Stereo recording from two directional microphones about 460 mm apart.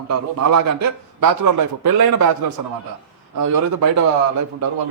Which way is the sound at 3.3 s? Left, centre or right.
Right.